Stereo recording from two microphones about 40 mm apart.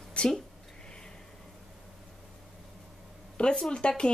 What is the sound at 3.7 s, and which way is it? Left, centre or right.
Speech, left.